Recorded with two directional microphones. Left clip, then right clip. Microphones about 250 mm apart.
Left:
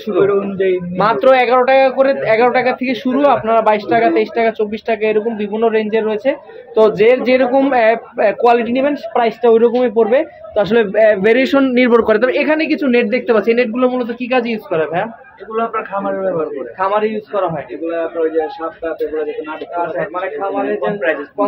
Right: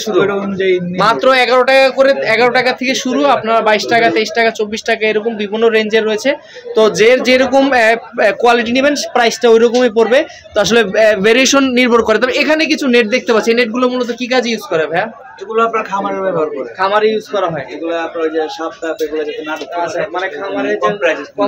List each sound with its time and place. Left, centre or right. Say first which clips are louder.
0.9 s a man's voice: even; centre
15.5 s a man's voice: right 5 dB; centre
16.8 s a man's voice: right 4 dB; centre